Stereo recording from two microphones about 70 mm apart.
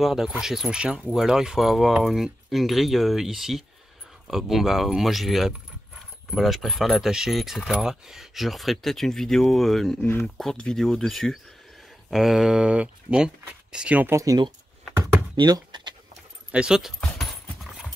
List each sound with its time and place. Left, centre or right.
0.0 s speech: centre
14.1 s speech: right
15.4 s speech: right
16.5 s speech: centre
17.0 s clip-clop: centre